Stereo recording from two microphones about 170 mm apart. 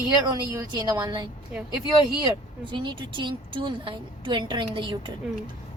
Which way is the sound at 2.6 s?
30° right (ahead or behind).